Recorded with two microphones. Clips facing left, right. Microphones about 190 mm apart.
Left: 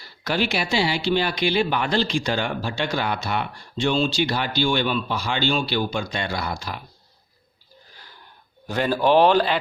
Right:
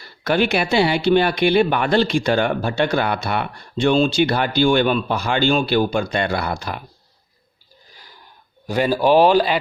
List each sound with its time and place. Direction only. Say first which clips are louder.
0.0 s speech: right 6 dB; 55° right (ahead or behind)
8.6 s speech: right 3 dB; 10° right (ahead or behind)